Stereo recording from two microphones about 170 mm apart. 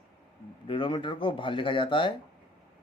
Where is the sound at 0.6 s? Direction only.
30° left (ahead or behind).